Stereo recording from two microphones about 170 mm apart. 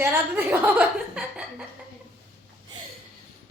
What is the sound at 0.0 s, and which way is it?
A woman's voice, 10° right (ahead or behind).